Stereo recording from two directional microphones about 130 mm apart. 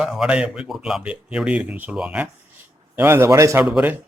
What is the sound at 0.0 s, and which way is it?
Speech, 5° right (ahead or behind).